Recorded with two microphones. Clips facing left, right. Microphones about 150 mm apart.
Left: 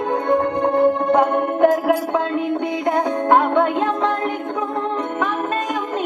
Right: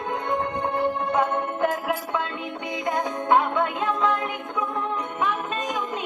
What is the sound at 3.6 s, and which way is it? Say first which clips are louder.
Music: left 6 dB; 35° left (ahead or behind).